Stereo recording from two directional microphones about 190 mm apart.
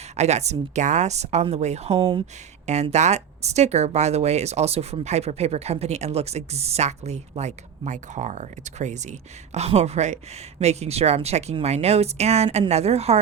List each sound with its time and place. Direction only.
0.2 s speech: 35° right (ahead or behind)